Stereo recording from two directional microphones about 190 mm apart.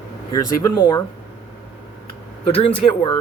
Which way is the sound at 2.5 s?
25° left (ahead or behind).